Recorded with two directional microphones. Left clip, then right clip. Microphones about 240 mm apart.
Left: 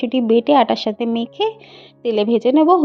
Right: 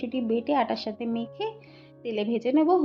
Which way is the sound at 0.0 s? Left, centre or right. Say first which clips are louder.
Left 12 dB; left.